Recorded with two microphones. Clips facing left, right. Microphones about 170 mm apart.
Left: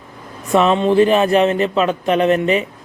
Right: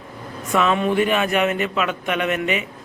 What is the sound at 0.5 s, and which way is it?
Speech, 30° left (ahead or behind).